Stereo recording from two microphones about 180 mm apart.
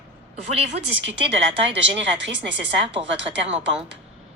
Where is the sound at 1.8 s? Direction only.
80° right.